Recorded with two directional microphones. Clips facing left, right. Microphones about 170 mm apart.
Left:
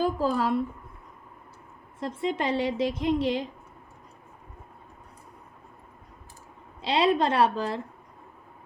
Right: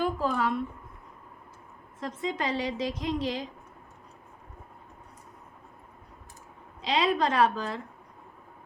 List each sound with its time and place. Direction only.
0.0 s speech: 35° left (ahead or behind)
2.0 s a woman's voice: 30° left (ahead or behind)
6.8 s a woman's voice: 30° left (ahead or behind)